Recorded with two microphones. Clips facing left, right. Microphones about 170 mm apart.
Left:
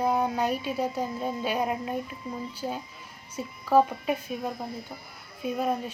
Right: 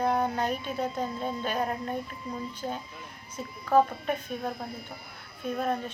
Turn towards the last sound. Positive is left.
turn(degrees=10)  # may be behind; listen again after turning